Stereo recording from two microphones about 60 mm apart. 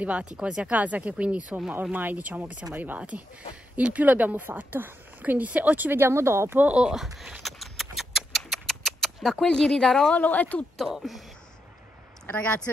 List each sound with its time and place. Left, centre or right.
0.0 s speech: right
6.6 s speech: centre
7.4 s a sound: centre
10.1 s speech: left
10.8 s speech: centre
12.3 s speech: left